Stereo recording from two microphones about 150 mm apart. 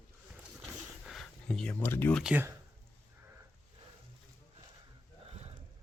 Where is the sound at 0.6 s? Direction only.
Centre (ahead or behind).